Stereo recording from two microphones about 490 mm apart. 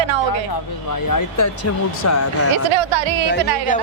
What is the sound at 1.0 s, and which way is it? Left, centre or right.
Speech, left.